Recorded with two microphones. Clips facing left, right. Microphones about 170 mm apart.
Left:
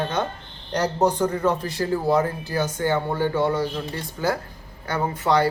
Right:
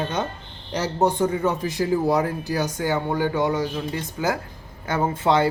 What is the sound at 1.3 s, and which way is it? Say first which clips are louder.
Speech: even; 15° right (ahead or behind).